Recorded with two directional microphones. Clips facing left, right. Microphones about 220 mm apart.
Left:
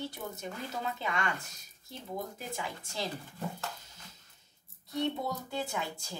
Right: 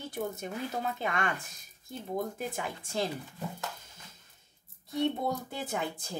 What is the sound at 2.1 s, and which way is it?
Speech, 50° right (ahead or behind).